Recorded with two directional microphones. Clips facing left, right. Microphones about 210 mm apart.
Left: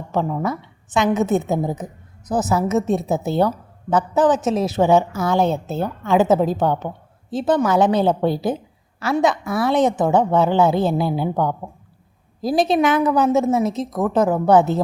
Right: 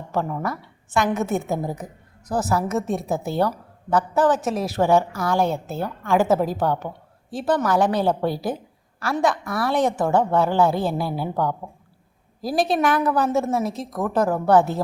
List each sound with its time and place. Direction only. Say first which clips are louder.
0.1 s a woman's voice: left 4 dB; 15° left (ahead or behind)
12.8 s a woman's voice: left 4 dB; 20° left (ahead or behind)